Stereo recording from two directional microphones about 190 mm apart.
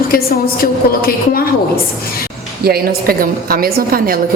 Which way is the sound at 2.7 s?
50° right (ahead or behind).